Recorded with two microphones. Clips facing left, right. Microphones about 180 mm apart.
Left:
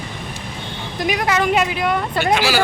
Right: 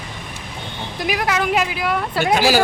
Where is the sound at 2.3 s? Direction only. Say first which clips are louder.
Right 4 dB; 45° right (ahead or behind).